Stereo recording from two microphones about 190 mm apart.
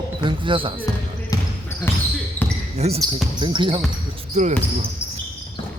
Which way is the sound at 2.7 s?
35° right (ahead or behind).